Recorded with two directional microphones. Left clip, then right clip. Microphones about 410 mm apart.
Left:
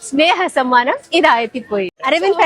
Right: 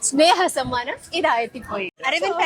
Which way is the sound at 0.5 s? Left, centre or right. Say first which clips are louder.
Left 11 dB; left.